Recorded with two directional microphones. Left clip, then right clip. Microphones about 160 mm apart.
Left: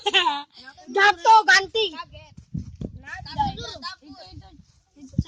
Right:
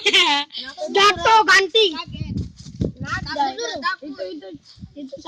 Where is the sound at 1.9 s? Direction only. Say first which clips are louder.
Right 7 dB; 60° left (ahead or behind).